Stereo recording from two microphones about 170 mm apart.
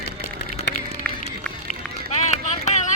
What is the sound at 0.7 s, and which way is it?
Run, 85° left.